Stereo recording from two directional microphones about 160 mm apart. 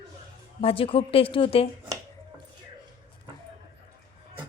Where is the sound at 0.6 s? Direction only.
35° left (ahead or behind).